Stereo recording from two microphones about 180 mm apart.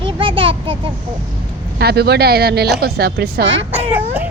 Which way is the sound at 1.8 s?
60° right (ahead or behind).